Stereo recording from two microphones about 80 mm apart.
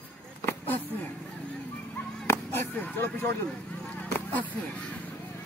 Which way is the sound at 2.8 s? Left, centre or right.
Left.